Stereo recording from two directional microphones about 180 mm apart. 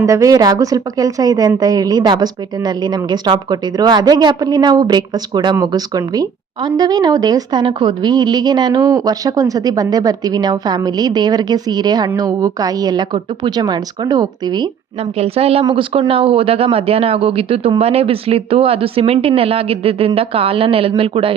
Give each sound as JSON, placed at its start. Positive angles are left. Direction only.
{"t": 0.0, "sound": "a woman's voice", "side_deg": -15}
{"t": 15.2, "sound": "speech", "side_deg": -35}